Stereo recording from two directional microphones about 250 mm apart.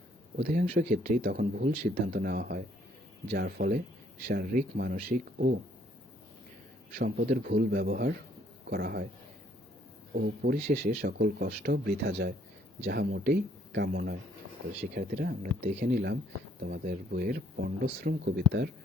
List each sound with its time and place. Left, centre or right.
0.3 s speech: right
7.0 s speech: right
10.2 s speech: right